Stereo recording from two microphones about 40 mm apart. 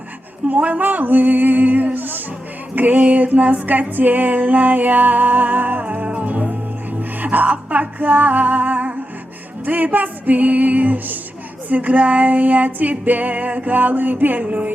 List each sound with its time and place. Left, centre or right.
0.4 s a sound: right
2.7 s music: right
9.6 s music: right